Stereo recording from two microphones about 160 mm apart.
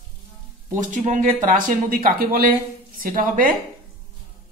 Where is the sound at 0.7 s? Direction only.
50° right (ahead or behind).